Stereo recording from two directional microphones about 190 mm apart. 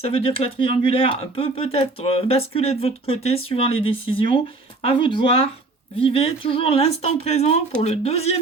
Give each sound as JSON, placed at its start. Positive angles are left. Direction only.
{"t": 0.0, "sound": "speech", "side_deg": 30}